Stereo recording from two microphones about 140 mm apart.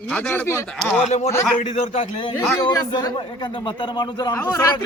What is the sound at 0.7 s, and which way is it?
Speech, 5° left (ahead or behind).